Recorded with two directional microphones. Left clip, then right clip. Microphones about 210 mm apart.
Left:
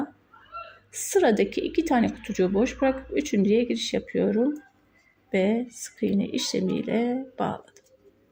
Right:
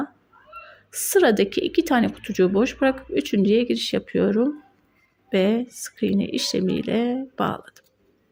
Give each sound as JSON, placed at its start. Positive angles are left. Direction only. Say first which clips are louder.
{"t": 0.9, "sound": "a woman's voice", "louder": "right 4 dB", "side_deg": -20}